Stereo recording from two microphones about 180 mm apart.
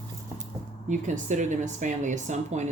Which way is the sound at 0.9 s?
45° right (ahead or behind).